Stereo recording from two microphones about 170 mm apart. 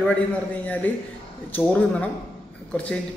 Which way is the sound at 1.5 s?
10° left (ahead or behind).